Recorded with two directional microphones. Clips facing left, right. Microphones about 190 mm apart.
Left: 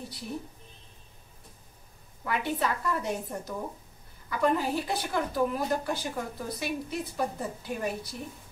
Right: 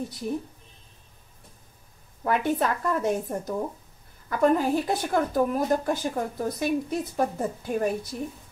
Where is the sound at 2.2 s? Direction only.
45° right (ahead or behind).